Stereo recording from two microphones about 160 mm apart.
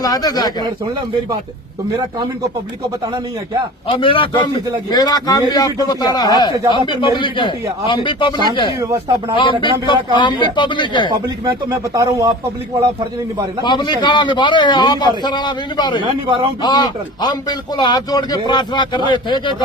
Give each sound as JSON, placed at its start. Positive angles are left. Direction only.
{"t": 0.0, "sound": "a man's voice", "side_deg": 25}
{"t": 3.8, "sound": "a man's voice", "side_deg": 30}
{"t": 8.8, "sound": "speech", "side_deg": -20}
{"t": 9.4, "sound": "a man's voice", "side_deg": 30}
{"t": 11.9, "sound": "speech", "side_deg": -20}
{"t": 13.6, "sound": "a man's voice", "side_deg": 30}
{"t": 16.0, "sound": "speech", "side_deg": -35}
{"t": 16.6, "sound": "a man's voice", "side_deg": 25}